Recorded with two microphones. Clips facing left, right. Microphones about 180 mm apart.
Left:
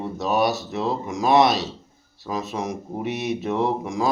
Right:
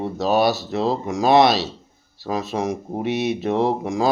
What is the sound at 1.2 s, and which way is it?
Speech, 90° right.